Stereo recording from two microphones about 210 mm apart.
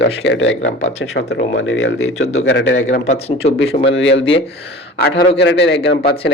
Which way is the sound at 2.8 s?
35° left (ahead or behind).